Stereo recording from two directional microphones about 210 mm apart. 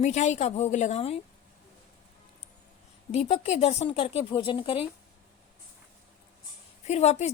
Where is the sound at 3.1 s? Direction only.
30° left (ahead or behind).